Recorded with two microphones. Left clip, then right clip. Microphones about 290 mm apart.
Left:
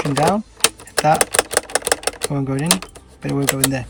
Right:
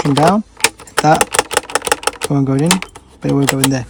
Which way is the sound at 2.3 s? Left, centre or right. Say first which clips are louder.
Right 7 dB; centre.